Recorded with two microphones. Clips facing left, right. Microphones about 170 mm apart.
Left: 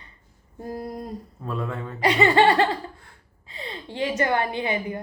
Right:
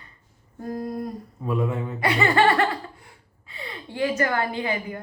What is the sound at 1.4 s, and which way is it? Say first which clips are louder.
Speech: right 5 dB; 15° right (ahead or behind).